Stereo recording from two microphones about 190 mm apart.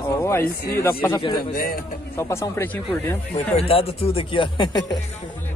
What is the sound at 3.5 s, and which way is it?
Speech, 30° left (ahead or behind).